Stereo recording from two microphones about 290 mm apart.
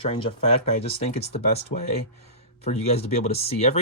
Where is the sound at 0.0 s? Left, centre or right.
Centre.